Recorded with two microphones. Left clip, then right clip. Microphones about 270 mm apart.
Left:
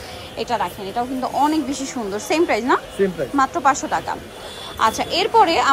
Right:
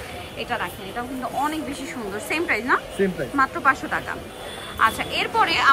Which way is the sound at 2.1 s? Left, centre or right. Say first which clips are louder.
Left 5 dB; centre.